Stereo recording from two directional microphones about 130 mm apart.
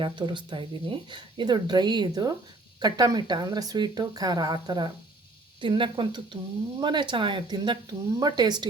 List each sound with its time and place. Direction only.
0.0 s speech: 40° right (ahead or behind)